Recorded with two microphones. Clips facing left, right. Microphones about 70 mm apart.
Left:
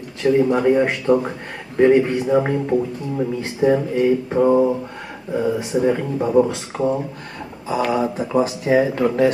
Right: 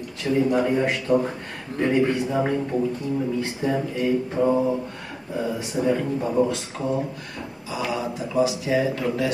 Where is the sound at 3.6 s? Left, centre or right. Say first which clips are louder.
Left 10 dB; left.